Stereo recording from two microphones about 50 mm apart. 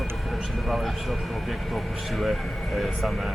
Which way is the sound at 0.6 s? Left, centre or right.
Centre.